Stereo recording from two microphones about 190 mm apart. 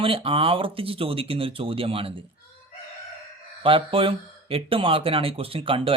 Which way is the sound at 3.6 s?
30° right (ahead or behind).